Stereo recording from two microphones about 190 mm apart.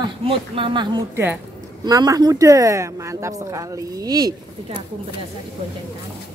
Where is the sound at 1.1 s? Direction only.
10° right (ahead or behind).